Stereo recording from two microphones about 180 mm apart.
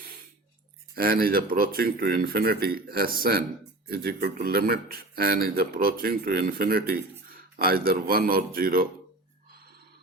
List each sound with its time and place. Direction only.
0.9 s speech: 55° right (ahead or behind)